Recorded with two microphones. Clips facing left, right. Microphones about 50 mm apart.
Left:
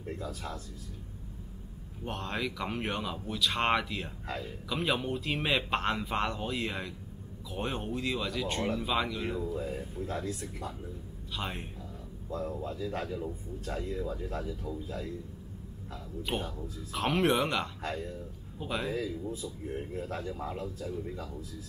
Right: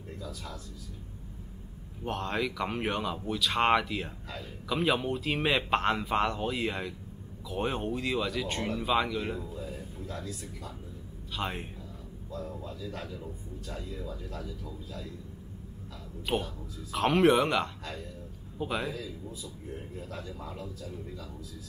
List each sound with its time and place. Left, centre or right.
0.2 s speech: left
2.0 s speech: centre
9.5 s speech: left
11.3 s speech: centre
12.3 s speech: left
16.2 s speech: centre
19.4 s speech: left